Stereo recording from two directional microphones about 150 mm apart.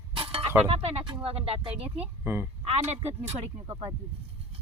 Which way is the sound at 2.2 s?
15° right (ahead or behind).